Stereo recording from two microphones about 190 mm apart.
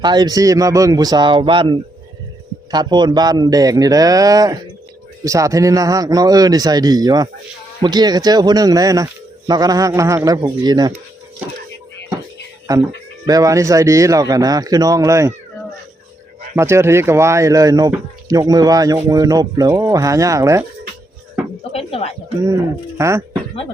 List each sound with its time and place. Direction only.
0.0 s a man's voice: 20° right (ahead or behind)
13.2 s speech: 20° right (ahead or behind)
16.6 s speech: 15° right (ahead or behind)
21.6 s a sound: 30° left (ahead or behind)
23.0 s speech: 15° right (ahead or behind)